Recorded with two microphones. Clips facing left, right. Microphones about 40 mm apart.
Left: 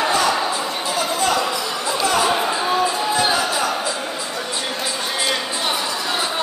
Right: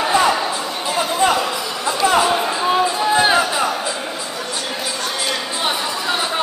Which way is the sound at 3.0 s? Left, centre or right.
Right.